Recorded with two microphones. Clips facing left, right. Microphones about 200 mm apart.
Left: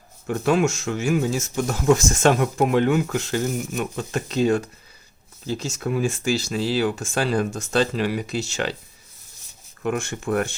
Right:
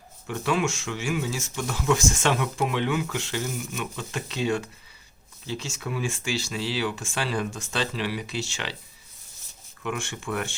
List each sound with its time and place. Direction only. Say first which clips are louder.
0.3 s speech: left 6 dB; 45° left (ahead or behind)
9.8 s speech: left 6 dB; 40° left (ahead or behind)